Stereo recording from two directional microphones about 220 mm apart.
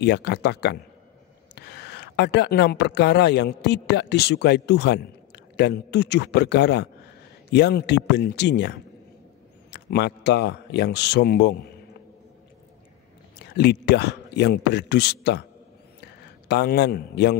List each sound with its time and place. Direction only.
0.0 s a man's voice: 50° left (ahead or behind)
13.6 s a man's voice: 50° left (ahead or behind)